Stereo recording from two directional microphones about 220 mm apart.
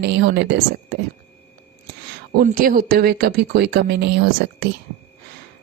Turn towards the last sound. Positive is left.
turn(degrees=-50)  # may be behind; listen again after turning